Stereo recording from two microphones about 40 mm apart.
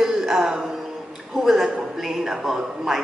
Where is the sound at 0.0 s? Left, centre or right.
Centre.